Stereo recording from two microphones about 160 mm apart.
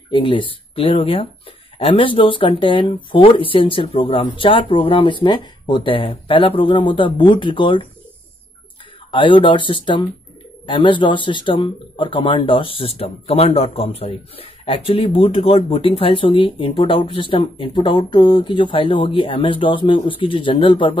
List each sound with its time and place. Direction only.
0.1 s speech: 30° left (ahead or behind)
9.1 s speech: 30° left (ahead or behind)